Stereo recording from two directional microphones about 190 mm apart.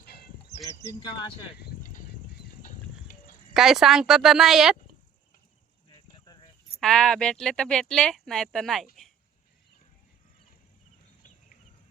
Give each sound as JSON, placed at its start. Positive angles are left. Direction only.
{"t": 0.0, "sound": "a sound", "side_deg": 55}
{"t": 0.7, "sound": "speech", "side_deg": 15}
{"t": 1.5, "sound": "a sound", "side_deg": 60}
{"t": 2.6, "sound": "horse", "side_deg": 45}
{"t": 3.5, "sound": "speech", "side_deg": 0}
{"t": 6.7, "sound": "speech", "side_deg": 5}